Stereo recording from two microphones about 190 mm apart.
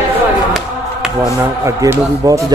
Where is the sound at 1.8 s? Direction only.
15° right (ahead or behind).